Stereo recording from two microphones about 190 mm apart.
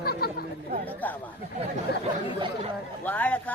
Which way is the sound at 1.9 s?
60° left (ahead or behind).